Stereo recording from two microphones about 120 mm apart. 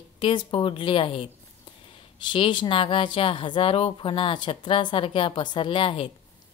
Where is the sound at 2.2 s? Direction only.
40° left (ahead or behind).